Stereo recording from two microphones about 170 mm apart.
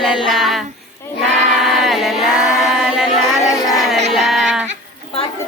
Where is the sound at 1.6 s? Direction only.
Centre (ahead or behind).